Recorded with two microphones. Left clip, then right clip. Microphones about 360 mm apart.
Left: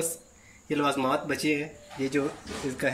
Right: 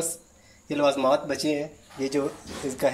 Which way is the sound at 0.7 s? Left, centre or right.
Centre.